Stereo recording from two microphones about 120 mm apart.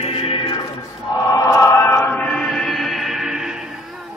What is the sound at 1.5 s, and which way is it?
Choir, 25° left (ahead or behind).